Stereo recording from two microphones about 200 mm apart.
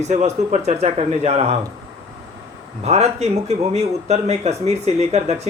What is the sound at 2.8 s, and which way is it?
Speech, 35° right (ahead or behind).